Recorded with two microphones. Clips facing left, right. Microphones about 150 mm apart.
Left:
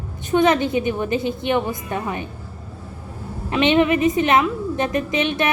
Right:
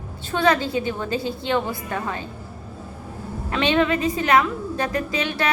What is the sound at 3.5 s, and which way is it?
A woman's voice, 20° left (ahead or behind).